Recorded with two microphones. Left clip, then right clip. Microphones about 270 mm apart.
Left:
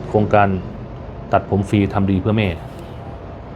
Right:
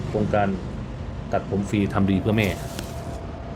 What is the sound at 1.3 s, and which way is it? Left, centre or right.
Speech, left.